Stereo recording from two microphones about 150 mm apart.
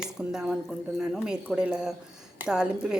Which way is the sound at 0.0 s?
5° right (ahead or behind).